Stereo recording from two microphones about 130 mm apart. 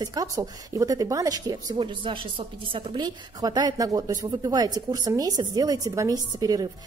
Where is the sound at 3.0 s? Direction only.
30° right (ahead or behind).